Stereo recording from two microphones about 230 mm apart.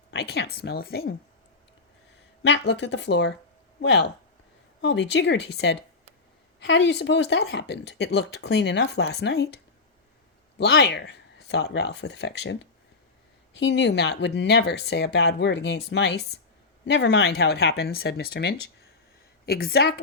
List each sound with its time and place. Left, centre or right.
0.1 s speech: left
2.4 s speech: left
10.6 s speech: left
13.6 s speech: left